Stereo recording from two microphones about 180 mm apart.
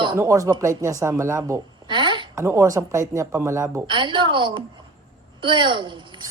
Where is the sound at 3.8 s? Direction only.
25° right (ahead or behind).